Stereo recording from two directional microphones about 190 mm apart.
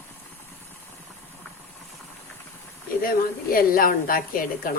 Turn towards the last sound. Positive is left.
turn(degrees=50)  # may be behind; listen again after turning